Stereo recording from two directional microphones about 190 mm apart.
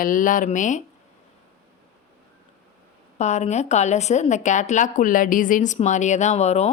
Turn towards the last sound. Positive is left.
turn(degrees=35)  # may be behind; listen again after turning